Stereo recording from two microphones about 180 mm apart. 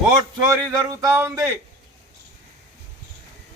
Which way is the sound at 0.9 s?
15° right (ahead or behind).